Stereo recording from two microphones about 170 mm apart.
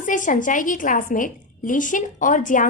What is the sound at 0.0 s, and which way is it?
A woman's voice, 50° left (ahead or behind).